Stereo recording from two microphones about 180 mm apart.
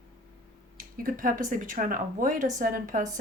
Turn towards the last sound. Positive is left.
turn(degrees=-50)  # may be behind; listen again after turning